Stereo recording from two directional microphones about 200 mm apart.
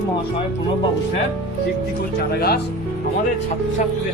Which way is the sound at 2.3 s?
55° left (ahead or behind).